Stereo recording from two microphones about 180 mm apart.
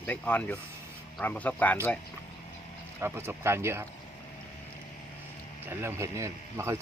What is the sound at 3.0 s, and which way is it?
Speech, 15° right (ahead or behind).